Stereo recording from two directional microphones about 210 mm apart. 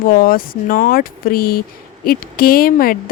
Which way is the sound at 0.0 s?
40° left (ahead or behind).